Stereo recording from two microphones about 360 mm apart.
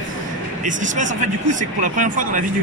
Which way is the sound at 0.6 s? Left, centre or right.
Right.